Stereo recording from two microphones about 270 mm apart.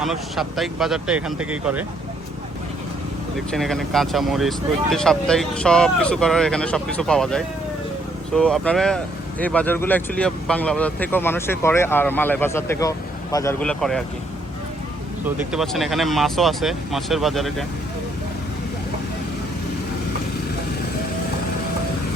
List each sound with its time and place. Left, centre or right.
0.0 s speech: centre
3.5 s speech: centre
15.5 s speech: centre